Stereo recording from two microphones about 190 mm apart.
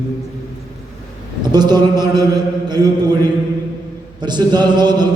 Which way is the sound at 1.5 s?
20° right (ahead or behind).